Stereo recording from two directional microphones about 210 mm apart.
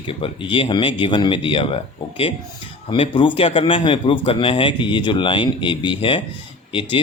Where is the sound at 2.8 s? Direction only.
25° left (ahead or behind).